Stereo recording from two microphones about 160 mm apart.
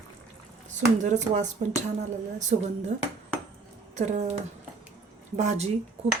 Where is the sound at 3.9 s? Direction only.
45° right (ahead or behind).